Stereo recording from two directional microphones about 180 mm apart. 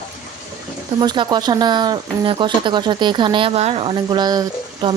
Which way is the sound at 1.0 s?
25° right (ahead or behind).